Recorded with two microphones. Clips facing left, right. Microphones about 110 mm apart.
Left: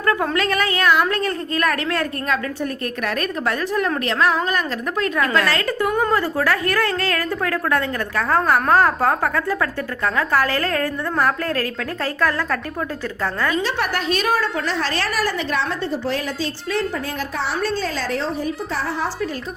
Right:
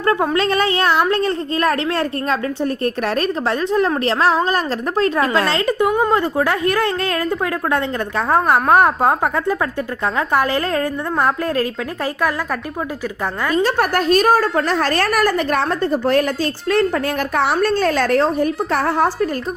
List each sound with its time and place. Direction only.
0.0 s a sound: 25° right (ahead or behind)
0.3 s a woman's voice: 30° right (ahead or behind)
13.5 s a woman's voice: 45° right (ahead or behind)